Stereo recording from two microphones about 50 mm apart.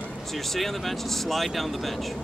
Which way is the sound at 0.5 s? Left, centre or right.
Centre.